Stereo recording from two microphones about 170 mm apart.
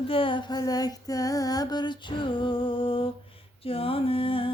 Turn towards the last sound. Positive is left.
turn(degrees=30)  # may be behind; listen again after turning